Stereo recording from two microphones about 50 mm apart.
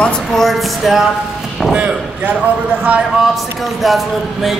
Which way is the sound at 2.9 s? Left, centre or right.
Right.